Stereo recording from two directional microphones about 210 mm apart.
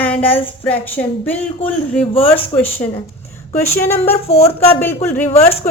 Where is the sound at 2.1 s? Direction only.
25° left (ahead or behind).